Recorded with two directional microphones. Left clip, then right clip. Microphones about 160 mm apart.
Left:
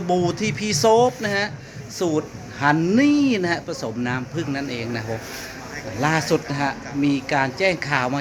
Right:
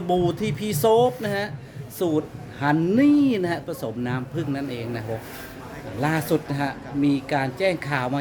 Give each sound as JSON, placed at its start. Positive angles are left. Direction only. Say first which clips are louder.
{"t": 0.1, "sound": "speech", "louder": "left 1 dB", "side_deg": -15}